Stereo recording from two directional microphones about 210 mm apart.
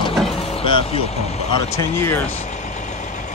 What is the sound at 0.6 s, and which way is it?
Vehicle, 25° left (ahead or behind).